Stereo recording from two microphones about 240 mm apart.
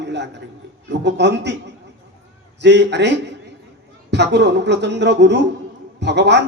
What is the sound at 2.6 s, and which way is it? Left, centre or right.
Speech, right.